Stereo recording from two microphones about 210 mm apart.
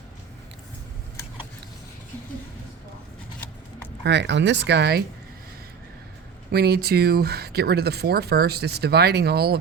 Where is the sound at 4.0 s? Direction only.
55° right (ahead or behind).